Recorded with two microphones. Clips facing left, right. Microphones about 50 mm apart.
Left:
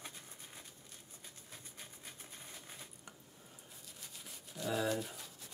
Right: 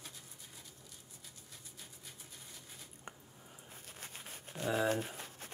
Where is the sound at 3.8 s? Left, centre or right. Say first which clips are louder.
Right 4 dB; right.